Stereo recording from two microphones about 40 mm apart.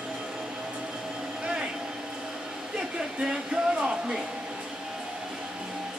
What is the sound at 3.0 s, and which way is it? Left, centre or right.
Speech, right.